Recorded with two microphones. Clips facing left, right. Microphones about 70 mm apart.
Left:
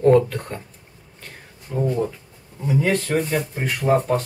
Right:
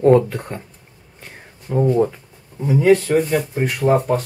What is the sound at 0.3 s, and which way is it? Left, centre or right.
Speech, centre.